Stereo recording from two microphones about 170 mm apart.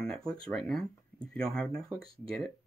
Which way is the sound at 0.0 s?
5° left (ahead or behind).